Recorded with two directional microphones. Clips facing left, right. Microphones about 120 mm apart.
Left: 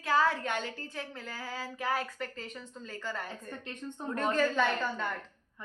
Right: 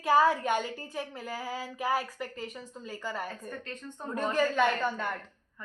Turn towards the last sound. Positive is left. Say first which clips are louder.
# right 3 dB
turn(degrees=-5)  # may be behind; listen again after turning